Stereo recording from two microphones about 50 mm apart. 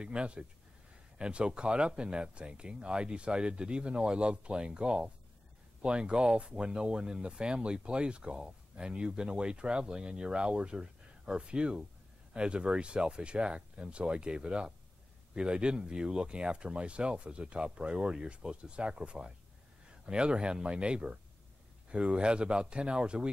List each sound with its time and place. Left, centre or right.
0.0 s speech: centre